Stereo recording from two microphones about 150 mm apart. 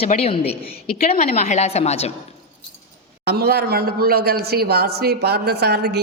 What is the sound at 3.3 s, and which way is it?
A man's voice, 90° right.